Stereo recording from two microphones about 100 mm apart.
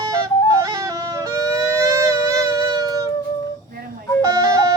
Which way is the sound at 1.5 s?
30° right (ahead or behind).